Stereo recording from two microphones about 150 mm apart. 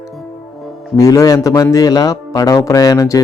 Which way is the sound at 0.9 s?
25° left (ahead or behind).